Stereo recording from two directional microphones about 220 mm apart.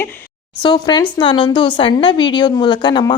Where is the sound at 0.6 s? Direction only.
20° left (ahead or behind).